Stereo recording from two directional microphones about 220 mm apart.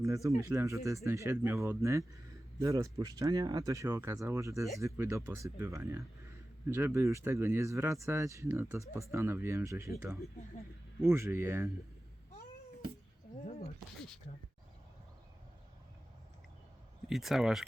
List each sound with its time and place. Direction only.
0.0 s speech: 15° right (ahead or behind)
13.4 s speech: 30° left (ahead or behind)
17.1 s speech: centre (ahead or behind)